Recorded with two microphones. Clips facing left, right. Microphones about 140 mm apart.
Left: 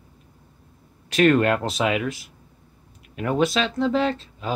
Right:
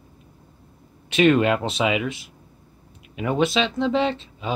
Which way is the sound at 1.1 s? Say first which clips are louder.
Even; 5° right (ahead or behind).